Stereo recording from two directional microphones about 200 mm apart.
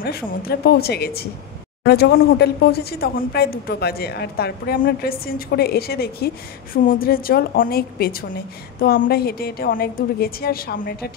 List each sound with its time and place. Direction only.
0.0 s a woman's voice: 50° left (ahead or behind)